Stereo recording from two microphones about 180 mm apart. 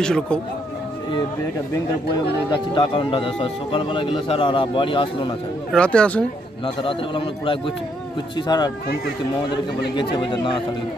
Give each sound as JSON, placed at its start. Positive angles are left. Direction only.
{"t": 0.0, "sound": "speech", "side_deg": 5}
{"t": 2.7, "sound": "a man's voice", "side_deg": 30}
{"t": 5.7, "sound": "speech", "side_deg": 5}
{"t": 6.6, "sound": "a man's voice", "side_deg": 30}
{"t": 9.9, "sound": "a man's voice", "side_deg": 25}